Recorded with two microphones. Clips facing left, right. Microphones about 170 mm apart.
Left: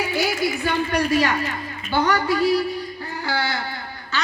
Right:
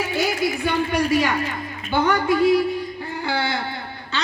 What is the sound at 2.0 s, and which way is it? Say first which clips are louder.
A woman's voice: right 3 dB; 20° right (ahead or behind).